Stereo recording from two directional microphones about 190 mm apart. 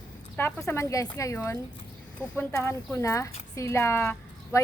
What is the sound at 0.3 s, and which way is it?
A woman's voice, 10° left (ahead or behind).